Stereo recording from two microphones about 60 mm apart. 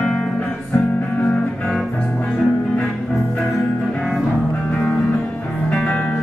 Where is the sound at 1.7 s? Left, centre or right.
Centre.